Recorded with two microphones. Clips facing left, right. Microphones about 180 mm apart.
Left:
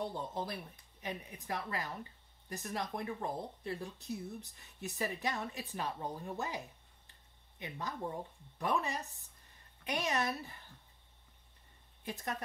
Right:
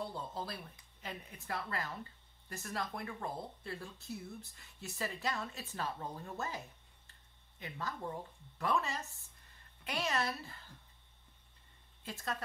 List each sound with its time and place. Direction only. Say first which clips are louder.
0.0 s a woman's voice: left 3 dB; 20° left (ahead or behind)
12.0 s a woman's voice: left 1 dB; 20° left (ahead or behind)